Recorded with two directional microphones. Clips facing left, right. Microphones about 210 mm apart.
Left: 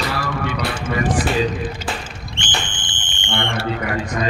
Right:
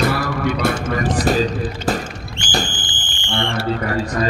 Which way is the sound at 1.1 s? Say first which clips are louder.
Right 5 dB; 40° right (ahead or behind).